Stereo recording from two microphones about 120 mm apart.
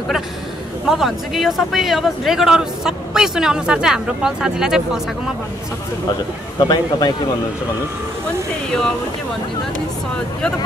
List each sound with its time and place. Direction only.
0.8 s speech: centre (ahead or behind)
6.6 s speech: 35° left (ahead or behind)